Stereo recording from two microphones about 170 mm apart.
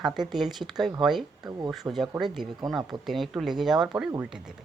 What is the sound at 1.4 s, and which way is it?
Speech, 25° right (ahead or behind).